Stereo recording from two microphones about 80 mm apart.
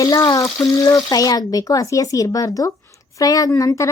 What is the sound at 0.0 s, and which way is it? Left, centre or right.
Speech, left.